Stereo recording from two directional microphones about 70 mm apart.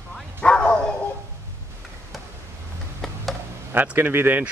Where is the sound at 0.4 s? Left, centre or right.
Centre.